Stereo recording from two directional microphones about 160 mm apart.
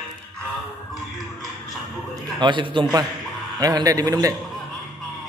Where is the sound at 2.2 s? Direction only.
30° right (ahead or behind).